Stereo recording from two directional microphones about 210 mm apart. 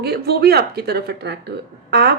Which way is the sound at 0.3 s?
50° right (ahead or behind).